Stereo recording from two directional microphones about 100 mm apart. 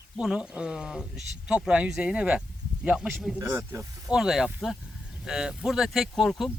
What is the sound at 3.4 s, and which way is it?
Speech, 25° right (ahead or behind).